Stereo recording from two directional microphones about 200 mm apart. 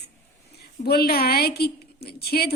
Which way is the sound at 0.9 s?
50° left (ahead or behind).